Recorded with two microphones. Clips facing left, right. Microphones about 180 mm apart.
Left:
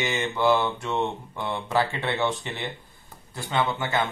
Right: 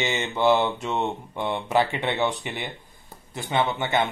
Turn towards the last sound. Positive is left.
turn(degrees=-20)  # may be behind; listen again after turning